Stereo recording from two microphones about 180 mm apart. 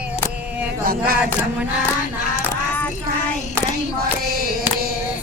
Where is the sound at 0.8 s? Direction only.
55° right (ahead or behind).